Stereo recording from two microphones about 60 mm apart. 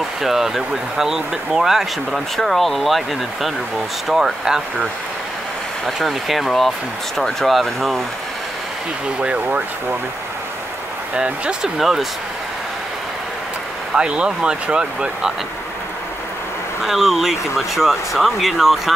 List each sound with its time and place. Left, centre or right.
0.2 s speech: centre
4.1 s speech: centre
5.9 s speech: centre
9.2 s speech: centre
11.1 s speech: centre
11.8 s speech: centre
13.9 s speech: centre
16.8 s speech: centre